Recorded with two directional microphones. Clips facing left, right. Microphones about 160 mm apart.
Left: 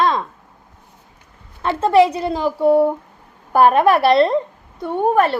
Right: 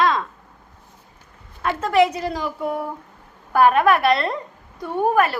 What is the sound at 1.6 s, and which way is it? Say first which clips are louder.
A woman's voice: left 4 dB; 30° left (ahead or behind).